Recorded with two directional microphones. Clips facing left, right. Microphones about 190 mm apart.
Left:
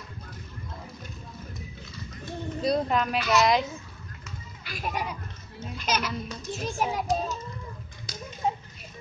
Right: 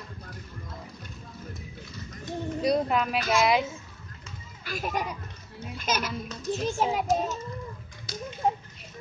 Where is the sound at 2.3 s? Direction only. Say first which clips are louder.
Right 1 dB; 10° right (ahead or behind).